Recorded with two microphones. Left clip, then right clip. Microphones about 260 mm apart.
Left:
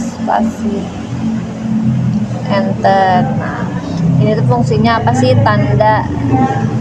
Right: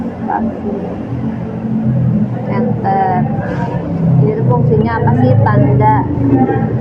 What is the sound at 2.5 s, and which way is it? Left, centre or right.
Speech, left.